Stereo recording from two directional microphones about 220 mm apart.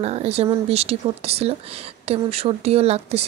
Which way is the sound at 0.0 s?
30° right (ahead or behind).